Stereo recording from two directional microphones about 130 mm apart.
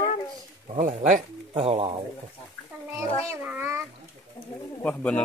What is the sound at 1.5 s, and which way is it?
Speech, 50° right (ahead or behind).